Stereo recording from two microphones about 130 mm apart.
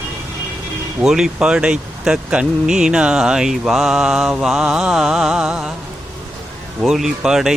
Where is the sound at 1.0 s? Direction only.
5° right (ahead or behind).